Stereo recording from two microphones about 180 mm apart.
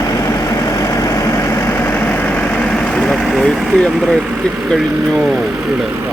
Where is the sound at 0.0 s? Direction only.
20° left (ahead or behind).